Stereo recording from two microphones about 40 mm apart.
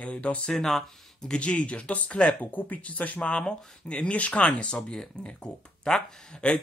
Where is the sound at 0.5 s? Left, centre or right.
Centre.